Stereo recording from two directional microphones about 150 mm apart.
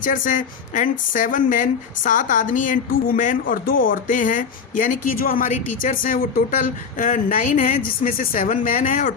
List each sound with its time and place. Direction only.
0.0 s speech: 60° left (ahead or behind)